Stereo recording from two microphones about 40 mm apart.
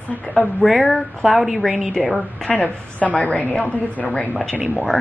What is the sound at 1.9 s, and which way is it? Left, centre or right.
Speech, centre.